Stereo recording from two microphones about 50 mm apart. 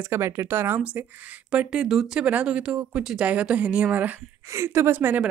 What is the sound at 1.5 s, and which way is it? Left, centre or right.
Speech, right.